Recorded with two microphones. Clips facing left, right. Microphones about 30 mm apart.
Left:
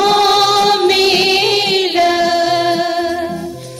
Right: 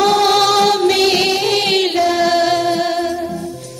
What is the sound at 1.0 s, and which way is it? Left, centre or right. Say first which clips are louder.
Music: left 2 dB; centre.